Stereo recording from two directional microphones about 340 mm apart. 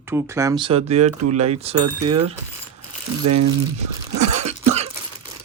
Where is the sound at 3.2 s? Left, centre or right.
Right.